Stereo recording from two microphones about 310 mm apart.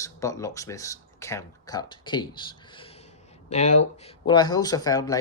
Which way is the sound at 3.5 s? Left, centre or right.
Left.